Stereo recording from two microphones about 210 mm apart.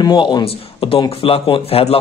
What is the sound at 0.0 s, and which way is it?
A man's voice, 20° left (ahead or behind).